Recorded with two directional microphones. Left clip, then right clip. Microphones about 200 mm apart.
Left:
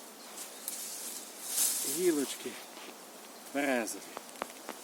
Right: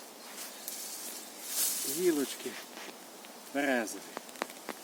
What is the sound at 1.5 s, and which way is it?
Snake, 10° right (ahead or behind).